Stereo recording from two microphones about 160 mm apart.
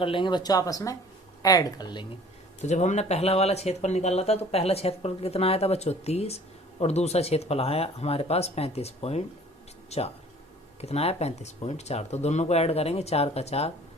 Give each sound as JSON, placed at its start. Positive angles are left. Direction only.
{"t": 0.0, "sound": "speech", "side_deg": 30}
{"t": 2.6, "sound": "speech", "side_deg": 50}